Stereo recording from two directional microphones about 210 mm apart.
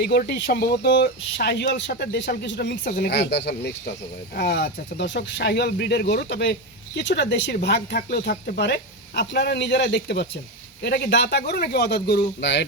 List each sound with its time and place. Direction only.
0.0 s speech: 50° left (ahead or behind)